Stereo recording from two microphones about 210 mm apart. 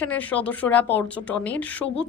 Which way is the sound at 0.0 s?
5° left (ahead or behind).